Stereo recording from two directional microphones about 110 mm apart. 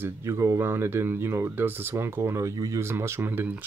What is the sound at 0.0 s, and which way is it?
Speech, 25° right (ahead or behind).